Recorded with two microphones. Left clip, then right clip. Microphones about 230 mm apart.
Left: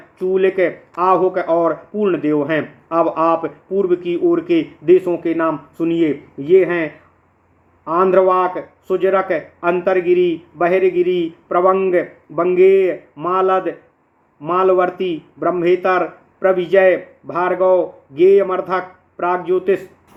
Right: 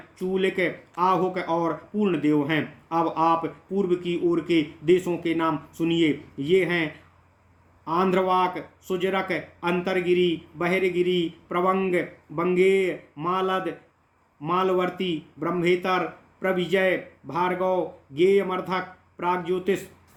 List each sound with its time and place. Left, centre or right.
0.3 s speech: right
7.9 s speech: right